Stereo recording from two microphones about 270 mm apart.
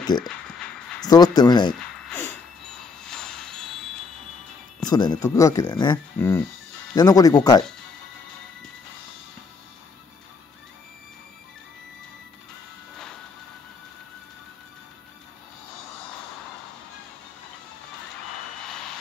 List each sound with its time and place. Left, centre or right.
0.0 s speech: centre
3.0 s a sound: centre
4.8 s speech: centre